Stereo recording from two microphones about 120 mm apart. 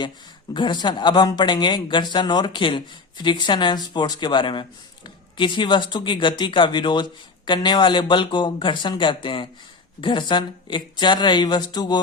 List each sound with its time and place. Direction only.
0.5 s speech: 40° left (ahead or behind)